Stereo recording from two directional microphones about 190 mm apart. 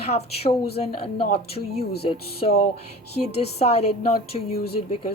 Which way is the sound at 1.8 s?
55° left (ahead or behind).